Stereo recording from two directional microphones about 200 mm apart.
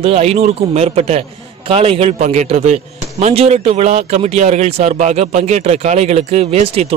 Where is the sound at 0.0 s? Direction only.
30° right (ahead or behind).